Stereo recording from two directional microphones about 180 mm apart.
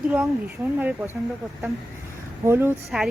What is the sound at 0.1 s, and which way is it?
Speech, 10° right (ahead or behind).